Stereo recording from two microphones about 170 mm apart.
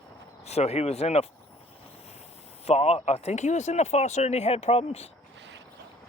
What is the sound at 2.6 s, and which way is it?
Speech, 40° left (ahead or behind).